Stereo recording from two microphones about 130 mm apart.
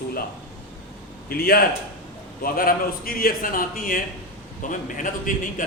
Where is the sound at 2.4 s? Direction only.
90° left.